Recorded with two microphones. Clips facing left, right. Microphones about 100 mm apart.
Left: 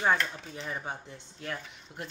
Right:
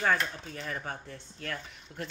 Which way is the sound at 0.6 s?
15° left (ahead or behind).